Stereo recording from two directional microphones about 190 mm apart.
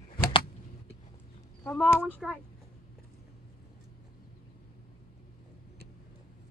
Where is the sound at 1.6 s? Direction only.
10° left (ahead or behind).